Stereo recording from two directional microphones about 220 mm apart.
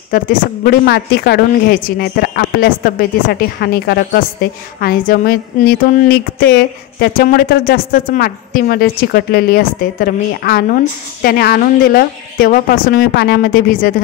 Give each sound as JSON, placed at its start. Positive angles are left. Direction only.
{"t": 0.1, "sound": "a woman's voice", "side_deg": 40}